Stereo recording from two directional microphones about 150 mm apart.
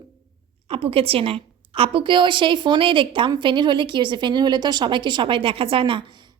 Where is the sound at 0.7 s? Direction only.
40° right (ahead or behind).